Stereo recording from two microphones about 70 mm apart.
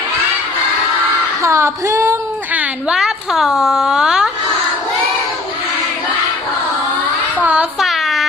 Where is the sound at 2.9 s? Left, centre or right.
Centre.